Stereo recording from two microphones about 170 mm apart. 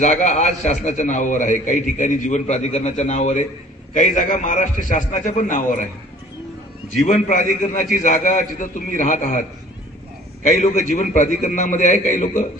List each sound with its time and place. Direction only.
0.0 s a man's voice: 45° left (ahead or behind)
7.0 s a man's voice: 45° left (ahead or behind)
10.4 s a man's voice: 45° left (ahead or behind)